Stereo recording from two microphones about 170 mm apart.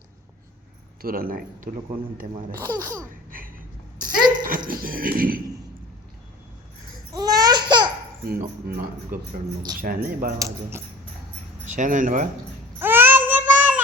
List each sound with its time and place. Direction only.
1.0 s speech: 60° right (ahead or behind)
2.6 s speech: 20° right (ahead or behind)
3.3 s a sound: 55° right (ahead or behind)
7.1 s babbling: 20° right (ahead or behind)
8.3 s speech: 60° right (ahead or behind)
10.3 s speech: 15° right (ahead or behind)
11.6 s speech: 50° right (ahead or behind)
12.8 s child singing: 10° right (ahead or behind)